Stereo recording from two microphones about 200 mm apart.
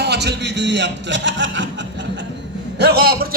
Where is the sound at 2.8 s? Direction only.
55° right (ahead or behind).